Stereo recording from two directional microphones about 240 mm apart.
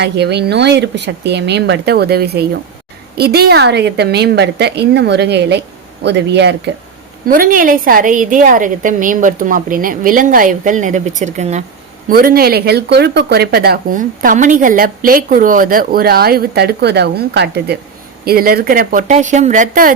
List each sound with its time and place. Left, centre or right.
0.0 s a woman's voice: right